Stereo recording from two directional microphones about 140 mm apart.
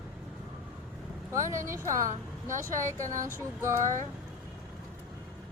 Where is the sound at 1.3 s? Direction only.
20° right (ahead or behind).